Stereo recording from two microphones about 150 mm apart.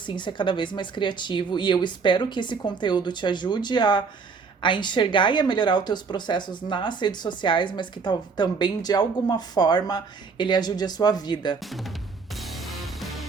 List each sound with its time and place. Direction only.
0.0 s a woman's voice: 30° left (ahead or behind)
12.4 s music: centre (ahead or behind)